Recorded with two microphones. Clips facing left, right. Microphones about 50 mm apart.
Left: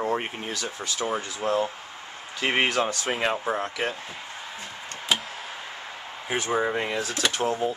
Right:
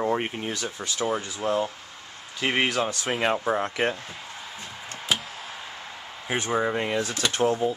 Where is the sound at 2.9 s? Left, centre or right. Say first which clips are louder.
Right 1 dB; centre.